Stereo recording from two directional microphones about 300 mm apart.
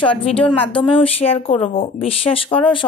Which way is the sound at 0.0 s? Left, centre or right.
Centre.